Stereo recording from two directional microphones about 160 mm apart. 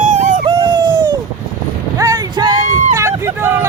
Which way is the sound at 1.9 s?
20° right (ahead or behind).